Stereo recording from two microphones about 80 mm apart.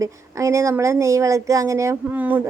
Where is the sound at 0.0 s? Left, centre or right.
Right.